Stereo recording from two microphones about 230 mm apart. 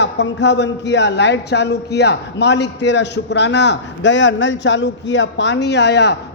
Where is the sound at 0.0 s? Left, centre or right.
Left.